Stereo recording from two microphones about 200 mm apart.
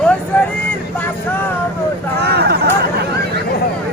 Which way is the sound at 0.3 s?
10° left (ahead or behind).